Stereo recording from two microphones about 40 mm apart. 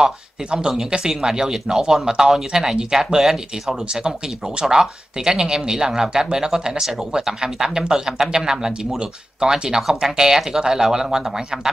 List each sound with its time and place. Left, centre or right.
0.0 s speech: centre